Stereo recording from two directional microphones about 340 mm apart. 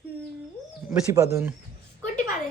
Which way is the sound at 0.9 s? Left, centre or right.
Centre.